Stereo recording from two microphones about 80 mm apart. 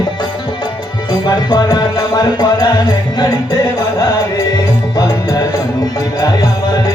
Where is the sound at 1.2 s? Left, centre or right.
Left.